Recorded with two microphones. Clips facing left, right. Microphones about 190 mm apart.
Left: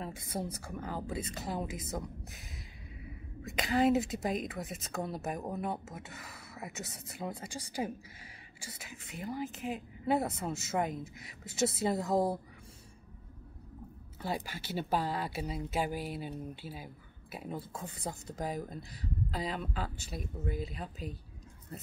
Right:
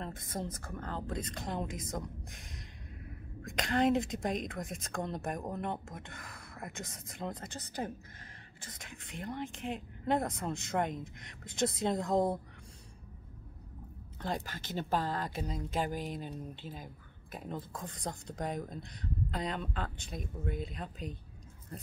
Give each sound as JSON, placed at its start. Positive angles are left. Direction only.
{"t": 0.0, "sound": "a woman's voice", "side_deg": 10}
{"t": 14.2, "sound": "speech", "side_deg": 10}